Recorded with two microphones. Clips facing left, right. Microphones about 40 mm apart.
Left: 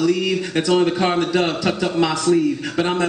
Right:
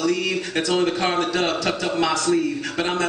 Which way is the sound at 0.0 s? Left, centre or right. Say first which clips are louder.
Left 3 dB; centre.